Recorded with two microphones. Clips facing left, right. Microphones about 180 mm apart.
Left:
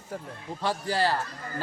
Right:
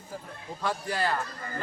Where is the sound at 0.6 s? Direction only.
30° left (ahead or behind).